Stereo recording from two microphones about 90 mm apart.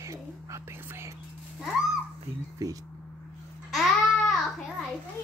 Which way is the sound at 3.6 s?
Centre (ahead or behind).